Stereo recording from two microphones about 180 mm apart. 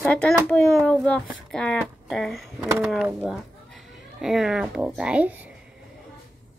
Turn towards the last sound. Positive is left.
turn(degrees=-10)  # may be behind; listen again after turning